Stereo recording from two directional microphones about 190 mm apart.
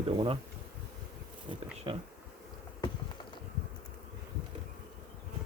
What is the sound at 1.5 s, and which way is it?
Speech, 25° right (ahead or behind).